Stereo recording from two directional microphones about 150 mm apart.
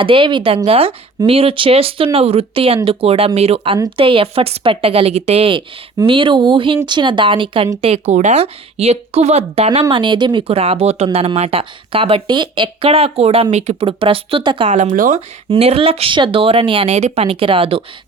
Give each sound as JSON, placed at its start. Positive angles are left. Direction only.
{"t": 0.0, "sound": "speech", "side_deg": -35}
{"t": 14.8, "sound": "speech", "side_deg": -60}
{"t": 15.4, "sound": "speech", "side_deg": -40}